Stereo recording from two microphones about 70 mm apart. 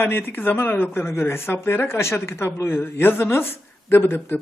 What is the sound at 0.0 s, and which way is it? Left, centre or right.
A woman's voice, left.